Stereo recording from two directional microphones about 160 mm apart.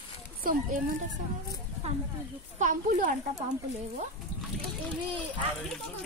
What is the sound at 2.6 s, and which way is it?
Speech, 55° right (ahead or behind).